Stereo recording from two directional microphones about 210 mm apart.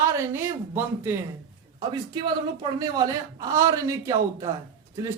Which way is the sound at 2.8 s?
15° right (ahead or behind).